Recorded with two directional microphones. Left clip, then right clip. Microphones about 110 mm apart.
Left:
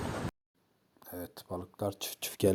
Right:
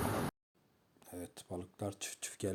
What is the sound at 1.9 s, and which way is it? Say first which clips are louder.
Speech: left 8 dB; 60° left (ahead or behind).